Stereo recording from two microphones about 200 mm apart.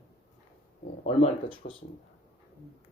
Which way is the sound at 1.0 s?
30° left (ahead or behind).